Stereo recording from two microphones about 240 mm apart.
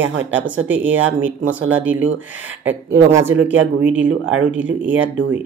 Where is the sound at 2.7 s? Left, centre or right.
Centre.